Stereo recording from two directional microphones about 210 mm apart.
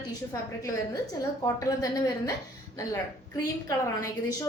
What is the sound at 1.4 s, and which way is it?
Speech, 15° left (ahead or behind).